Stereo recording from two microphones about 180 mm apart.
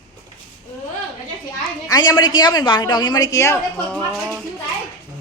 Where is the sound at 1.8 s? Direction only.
20° left (ahead or behind).